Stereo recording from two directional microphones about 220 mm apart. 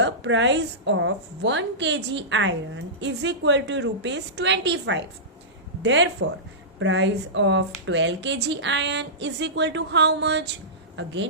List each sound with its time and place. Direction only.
0.0 s a woman's voice: 55° right (ahead or behind)